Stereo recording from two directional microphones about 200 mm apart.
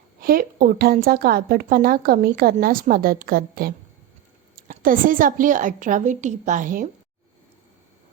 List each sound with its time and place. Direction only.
0.2 s a woman's voice: 45° right (ahead or behind)
4.7 s a woman's voice: 45° right (ahead or behind)